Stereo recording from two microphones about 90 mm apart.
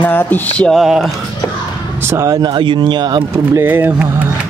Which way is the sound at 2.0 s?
35° right (ahead or behind).